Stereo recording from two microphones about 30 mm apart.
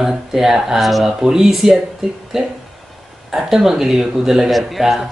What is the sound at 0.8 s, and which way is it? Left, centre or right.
Speech, centre.